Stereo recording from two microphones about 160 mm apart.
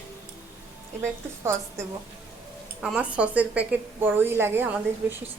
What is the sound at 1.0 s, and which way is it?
Speech, 15° right (ahead or behind).